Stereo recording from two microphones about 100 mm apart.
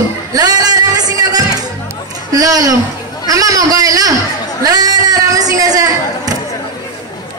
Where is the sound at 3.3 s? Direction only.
35° right (ahead or behind).